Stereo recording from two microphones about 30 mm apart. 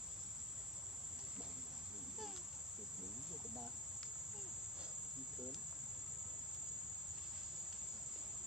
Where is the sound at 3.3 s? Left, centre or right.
Centre.